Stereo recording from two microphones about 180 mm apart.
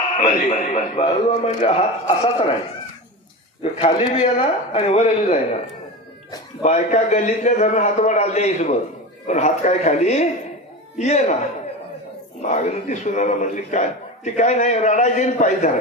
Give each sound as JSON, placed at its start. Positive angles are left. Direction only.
{"t": 0.2, "sound": "a man's voice", "side_deg": 45}
{"t": 3.8, "sound": "a man's voice", "side_deg": 30}
{"t": 6.6, "sound": "a man's voice", "side_deg": 40}
{"t": 12.4, "sound": "a man's voice", "side_deg": 40}